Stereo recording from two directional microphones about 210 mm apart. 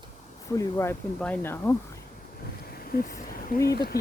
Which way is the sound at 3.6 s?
45° left (ahead or behind).